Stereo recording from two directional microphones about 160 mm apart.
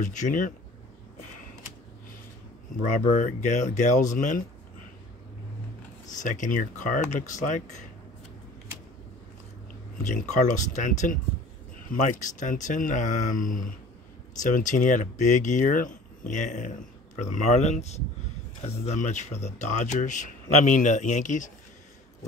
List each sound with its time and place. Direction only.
0.0 s speech: 50° left (ahead or behind)
3.2 s speech: 50° left (ahead or behind)
6.1 s speech: 55° left (ahead or behind)
10.0 s speech: 50° left (ahead or behind)